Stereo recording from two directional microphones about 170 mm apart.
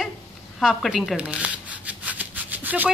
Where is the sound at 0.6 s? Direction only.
Centre (ahead or behind).